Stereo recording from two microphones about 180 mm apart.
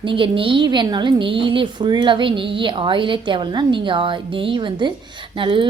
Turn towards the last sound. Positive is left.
turn(degrees=-25)  # may be behind; listen again after turning